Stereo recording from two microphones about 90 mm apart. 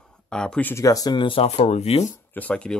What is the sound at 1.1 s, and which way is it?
Speech, 70° left (ahead or behind).